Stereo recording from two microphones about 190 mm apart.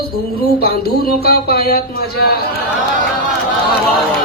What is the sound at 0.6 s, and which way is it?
Speech, 55° left (ahead or behind).